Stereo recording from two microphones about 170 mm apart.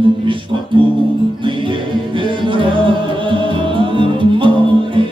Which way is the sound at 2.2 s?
30° right (ahead or behind).